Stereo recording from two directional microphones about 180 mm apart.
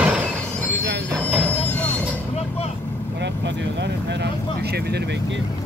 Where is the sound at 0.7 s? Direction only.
75° right (ahead or behind).